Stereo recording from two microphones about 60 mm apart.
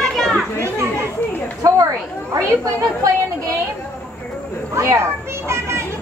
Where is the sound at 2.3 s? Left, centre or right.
Right.